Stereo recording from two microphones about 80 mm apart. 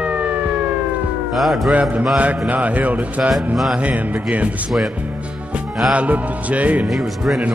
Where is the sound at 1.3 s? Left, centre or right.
Centre.